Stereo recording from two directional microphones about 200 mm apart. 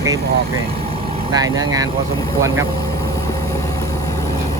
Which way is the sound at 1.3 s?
20° right (ahead or behind).